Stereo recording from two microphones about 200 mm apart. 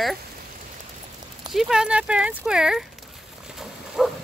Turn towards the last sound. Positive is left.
turn(degrees=0)  # may be behind; listen again after turning